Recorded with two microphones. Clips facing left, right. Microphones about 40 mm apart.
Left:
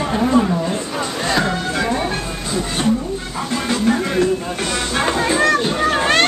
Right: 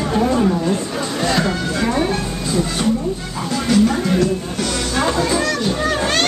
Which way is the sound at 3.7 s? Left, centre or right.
Left.